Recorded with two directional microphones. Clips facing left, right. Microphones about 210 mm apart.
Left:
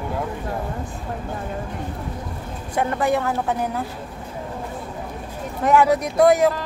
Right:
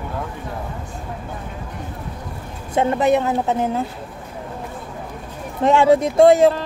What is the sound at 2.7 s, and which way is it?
Speech, 20° right (ahead or behind).